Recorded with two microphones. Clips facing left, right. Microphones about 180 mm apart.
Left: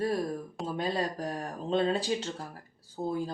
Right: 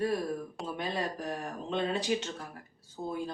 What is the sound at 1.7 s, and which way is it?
Speech, 35° left (ahead or behind).